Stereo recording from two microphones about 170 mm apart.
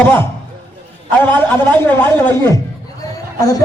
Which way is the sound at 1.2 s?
10° left (ahead or behind).